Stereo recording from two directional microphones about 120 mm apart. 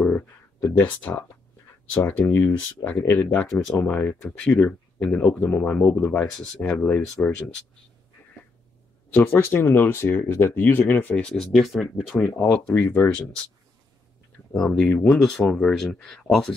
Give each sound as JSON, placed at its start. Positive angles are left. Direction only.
{"t": 0.6, "sound": "speech", "side_deg": 15}
{"t": 9.1, "sound": "speech", "side_deg": 20}
{"t": 11.5, "sound": "speech", "side_deg": 0}
{"t": 12.2, "sound": "speech", "side_deg": 10}
{"t": 14.5, "sound": "speech", "side_deg": 5}